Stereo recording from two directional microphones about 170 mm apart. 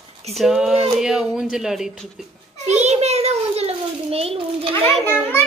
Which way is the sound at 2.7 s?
40° right (ahead or behind).